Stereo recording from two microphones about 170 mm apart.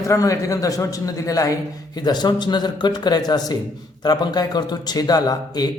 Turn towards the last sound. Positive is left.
turn(degrees=20)  # may be behind; listen again after turning